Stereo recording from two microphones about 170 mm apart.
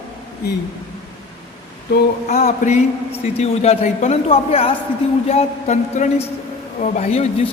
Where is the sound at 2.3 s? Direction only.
45° left (ahead or behind).